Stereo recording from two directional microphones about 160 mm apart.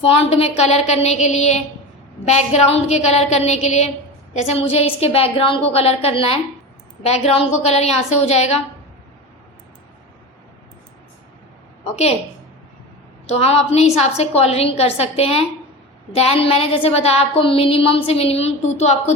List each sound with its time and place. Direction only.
0.0 s a woman's voice: 40° left (ahead or behind)
13.2 s a woman's voice: 40° left (ahead or behind)